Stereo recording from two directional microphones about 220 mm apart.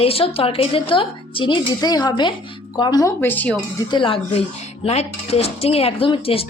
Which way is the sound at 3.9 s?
25° left (ahead or behind).